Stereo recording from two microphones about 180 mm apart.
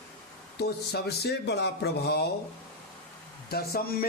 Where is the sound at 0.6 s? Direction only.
65° left (ahead or behind).